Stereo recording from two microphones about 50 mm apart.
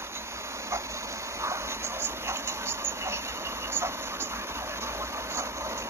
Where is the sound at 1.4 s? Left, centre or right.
Right.